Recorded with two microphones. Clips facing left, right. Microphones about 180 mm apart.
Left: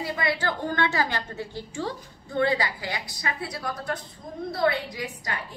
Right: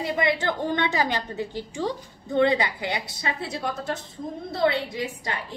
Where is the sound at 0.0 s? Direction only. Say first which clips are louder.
Right 3 dB; 20° right (ahead or behind).